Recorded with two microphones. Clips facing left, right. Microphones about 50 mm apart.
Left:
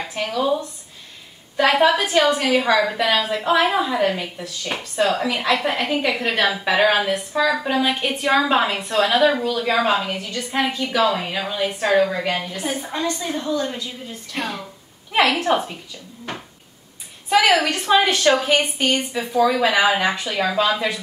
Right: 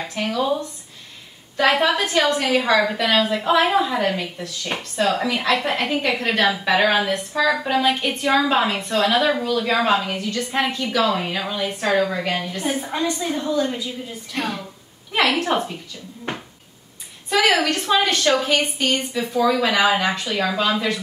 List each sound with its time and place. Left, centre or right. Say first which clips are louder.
0.0 s a woman's voice: even; centre
1.7 s a woman's voice: left 2 dB; centre
12.5 s a woman's voice: right 2 dB; centre
13.5 s a woman's voice: right 2 dB; centre
14.3 s a woman's voice: right 1 dB; centre
16.3 s cupboard open or close: right 2 dB; right
17.6 s a woman's voice: left 2 dB; centre